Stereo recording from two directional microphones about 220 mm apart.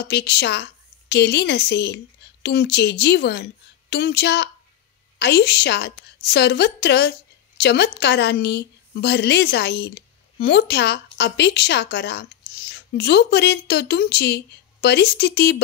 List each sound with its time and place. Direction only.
0.0 s a woman's voice: 50° left (ahead or behind)